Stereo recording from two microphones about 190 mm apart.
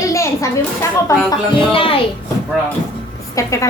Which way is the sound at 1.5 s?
30° left (ahead or behind).